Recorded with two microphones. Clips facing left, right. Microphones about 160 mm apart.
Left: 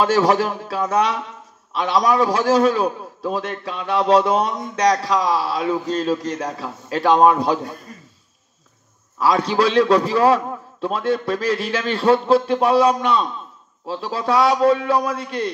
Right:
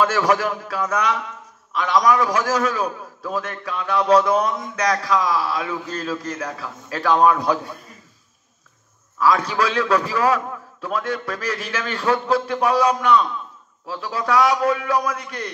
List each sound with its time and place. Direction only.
0.0 s a man's voice: 30° left (ahead or behind)
7.9 s a sound: 45° left (ahead or behind)
9.2 s a man's voice: 30° left (ahead or behind)